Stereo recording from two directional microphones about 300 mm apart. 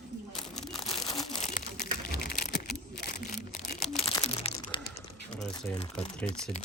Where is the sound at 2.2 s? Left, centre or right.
Left.